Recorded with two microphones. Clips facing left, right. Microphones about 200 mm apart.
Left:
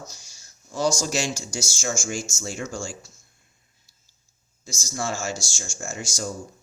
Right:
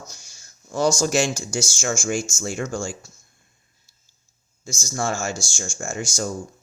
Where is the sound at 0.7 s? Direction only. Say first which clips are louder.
Right 4 dB; 55° right (ahead or behind).